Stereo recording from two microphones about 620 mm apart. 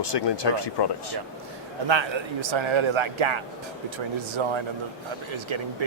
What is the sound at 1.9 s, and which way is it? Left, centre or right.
A man's voice, right.